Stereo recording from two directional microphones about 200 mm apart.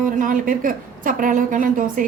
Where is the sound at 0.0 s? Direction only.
45° right (ahead or behind).